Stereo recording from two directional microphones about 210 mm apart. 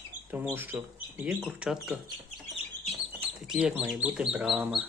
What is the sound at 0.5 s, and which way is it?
Speech, 10° right (ahead or behind).